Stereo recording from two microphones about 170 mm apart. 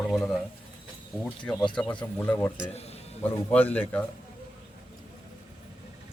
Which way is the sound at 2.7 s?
40° left (ahead or behind).